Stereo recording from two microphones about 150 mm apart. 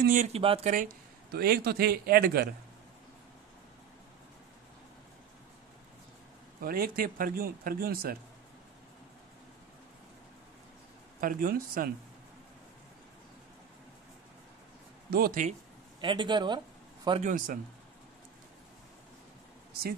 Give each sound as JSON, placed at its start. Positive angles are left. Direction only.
{"t": 0.2, "sound": "speech", "side_deg": -40}
{"t": 1.3, "sound": "a man's voice", "side_deg": -90}
{"t": 6.6, "sound": "speech", "side_deg": -75}
{"t": 11.1, "sound": "speech", "side_deg": -70}
{"t": 15.0, "sound": "speech", "side_deg": -85}
{"t": 16.0, "sound": "a man's voice", "side_deg": -30}
{"t": 17.2, "sound": "speech", "side_deg": -60}